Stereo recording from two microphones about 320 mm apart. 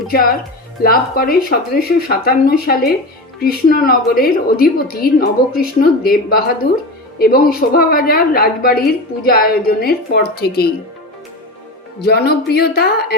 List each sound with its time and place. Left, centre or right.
0.8 s a woman's voice: left
12.0 s a woman's voice: left